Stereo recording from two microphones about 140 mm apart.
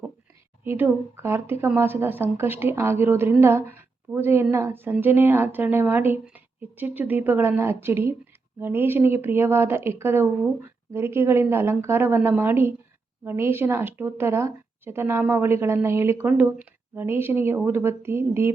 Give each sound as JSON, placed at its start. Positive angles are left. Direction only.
{"t": 0.6, "sound": "a woman's voice", "side_deg": -15}